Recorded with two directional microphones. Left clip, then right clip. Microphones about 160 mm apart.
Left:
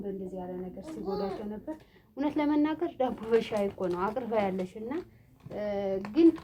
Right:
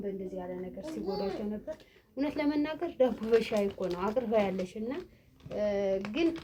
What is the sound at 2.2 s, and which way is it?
Speech, 35° left (ahead or behind).